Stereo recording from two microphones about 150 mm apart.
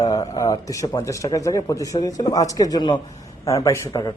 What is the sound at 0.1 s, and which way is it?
A man's voice, 25° left (ahead or behind).